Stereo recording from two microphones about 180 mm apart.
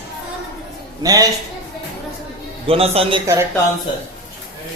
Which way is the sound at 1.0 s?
20° right (ahead or behind).